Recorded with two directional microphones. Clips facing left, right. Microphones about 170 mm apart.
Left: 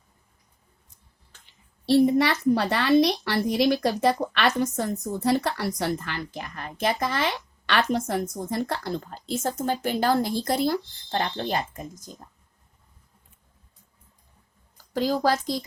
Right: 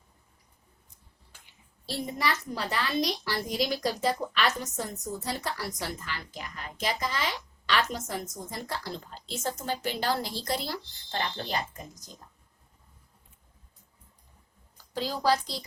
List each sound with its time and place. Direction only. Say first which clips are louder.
1.3 s a sound: even; 10° right (ahead or behind)
1.9 s a woman's voice: left 12 dB; 65° left (ahead or behind); by 12.1 s 50° left (ahead or behind)
14.9 s speech: left 4 dB; 45° left (ahead or behind)